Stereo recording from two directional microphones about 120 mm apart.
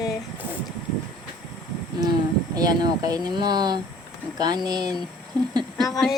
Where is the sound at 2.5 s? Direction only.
35° right (ahead or behind).